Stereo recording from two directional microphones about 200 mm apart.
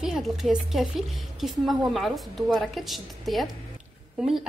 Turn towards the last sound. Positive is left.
turn(degrees=0)  # may be behind; listen again after turning